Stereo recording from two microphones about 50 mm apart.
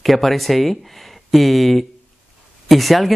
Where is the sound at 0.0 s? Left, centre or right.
Centre.